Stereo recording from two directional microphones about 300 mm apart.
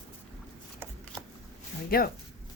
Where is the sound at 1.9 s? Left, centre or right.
Left.